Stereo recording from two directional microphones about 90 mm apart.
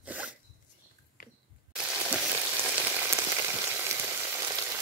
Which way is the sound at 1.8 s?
15° right (ahead or behind).